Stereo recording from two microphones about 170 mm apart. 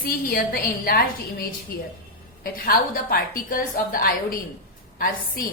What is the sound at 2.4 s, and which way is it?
A woman's voice, 60° left (ahead or behind).